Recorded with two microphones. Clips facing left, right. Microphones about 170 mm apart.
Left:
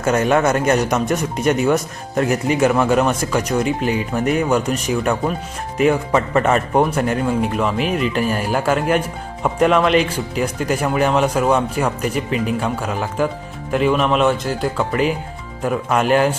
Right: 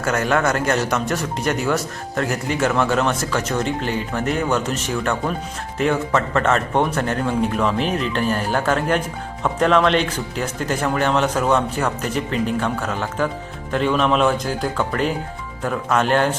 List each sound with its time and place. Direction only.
0.0 s speech: 20° left (ahead or behind)